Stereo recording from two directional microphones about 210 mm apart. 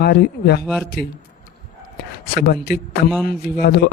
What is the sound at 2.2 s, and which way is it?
A man's voice, 50° left (ahead or behind).